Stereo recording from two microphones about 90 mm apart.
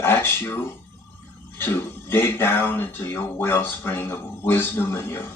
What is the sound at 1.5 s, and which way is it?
Speech, 25° left (ahead or behind).